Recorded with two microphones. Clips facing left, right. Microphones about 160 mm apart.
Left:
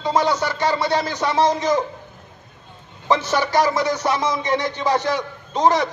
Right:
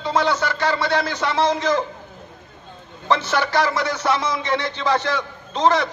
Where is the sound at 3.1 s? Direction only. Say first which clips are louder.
Left 1 dB; 15° left (ahead or behind).